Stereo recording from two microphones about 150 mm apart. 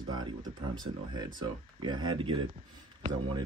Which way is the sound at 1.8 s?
30° right (ahead or behind).